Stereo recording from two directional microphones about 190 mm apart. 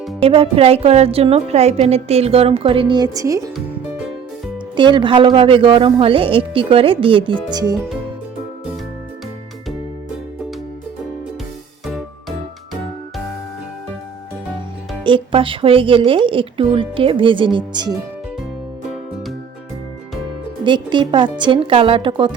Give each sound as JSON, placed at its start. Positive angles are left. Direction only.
{"t": 0.2, "sound": "a woman's voice", "side_deg": -30}
{"t": 4.8, "sound": "speech", "side_deg": -25}
{"t": 15.0, "sound": "speech", "side_deg": -25}
{"t": 20.7, "sound": "speech", "side_deg": -25}